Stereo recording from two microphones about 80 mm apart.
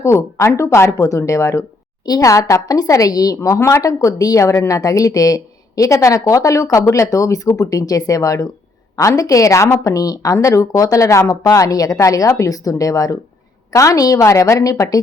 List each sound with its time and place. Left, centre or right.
0.0 s speech: left